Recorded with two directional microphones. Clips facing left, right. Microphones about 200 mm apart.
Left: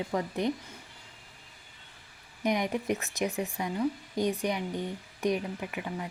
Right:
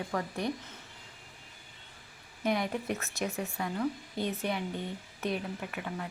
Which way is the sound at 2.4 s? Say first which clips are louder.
Left 2 dB; 15° left (ahead or behind).